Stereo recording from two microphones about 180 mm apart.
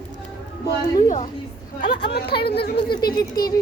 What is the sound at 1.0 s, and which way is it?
Speech, 45° left (ahead or behind).